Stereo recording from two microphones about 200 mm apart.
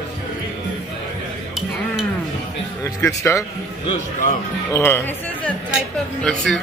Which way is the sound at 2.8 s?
15° left (ahead or behind).